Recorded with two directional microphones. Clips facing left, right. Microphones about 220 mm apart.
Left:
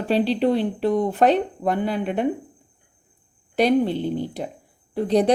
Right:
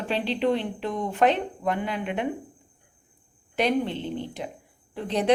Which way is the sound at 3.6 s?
35° left (ahead or behind).